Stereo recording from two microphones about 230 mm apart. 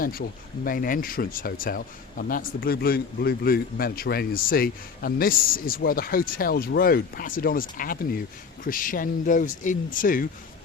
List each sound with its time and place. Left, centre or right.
0.0 s speech: left